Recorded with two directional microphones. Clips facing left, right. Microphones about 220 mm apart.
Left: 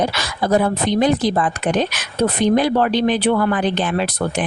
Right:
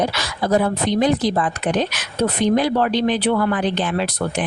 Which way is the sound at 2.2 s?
55° left (ahead or behind).